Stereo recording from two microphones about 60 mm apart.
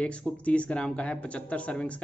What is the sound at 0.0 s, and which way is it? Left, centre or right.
Speech, centre.